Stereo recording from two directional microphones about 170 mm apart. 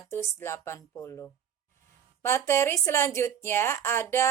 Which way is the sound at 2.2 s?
15° left (ahead or behind).